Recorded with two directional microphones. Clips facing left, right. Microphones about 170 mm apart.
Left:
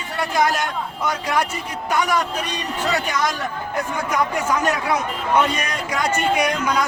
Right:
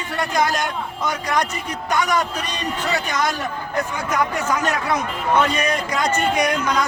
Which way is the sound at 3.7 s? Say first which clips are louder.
Even; 10° left (ahead or behind).